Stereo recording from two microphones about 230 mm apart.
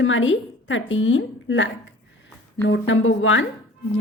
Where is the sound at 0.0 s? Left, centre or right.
Left.